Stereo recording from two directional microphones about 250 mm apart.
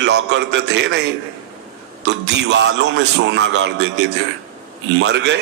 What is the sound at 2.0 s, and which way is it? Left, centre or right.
A man's voice, right.